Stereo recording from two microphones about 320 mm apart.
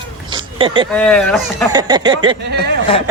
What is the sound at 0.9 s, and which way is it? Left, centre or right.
Speech, centre.